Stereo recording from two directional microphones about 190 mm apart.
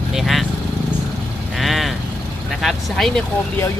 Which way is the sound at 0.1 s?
Centre (ahead or behind).